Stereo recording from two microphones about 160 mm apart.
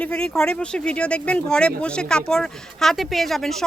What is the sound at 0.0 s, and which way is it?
Speech, 5° left (ahead or behind).